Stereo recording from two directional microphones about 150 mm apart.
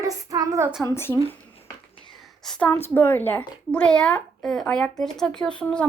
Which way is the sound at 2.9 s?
10° left (ahead or behind).